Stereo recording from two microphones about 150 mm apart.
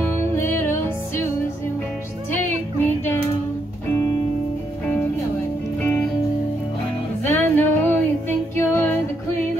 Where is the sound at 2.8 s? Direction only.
15° left (ahead or behind).